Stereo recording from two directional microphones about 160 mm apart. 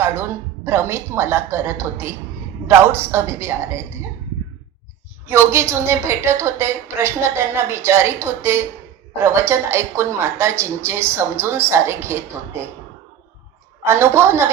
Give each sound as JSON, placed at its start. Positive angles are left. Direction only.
{"t": 0.0, "sound": "a woman's voice", "side_deg": -15}
{"t": 5.2, "sound": "a woman's voice", "side_deg": -15}
{"t": 13.8, "sound": "a woman's voice", "side_deg": -15}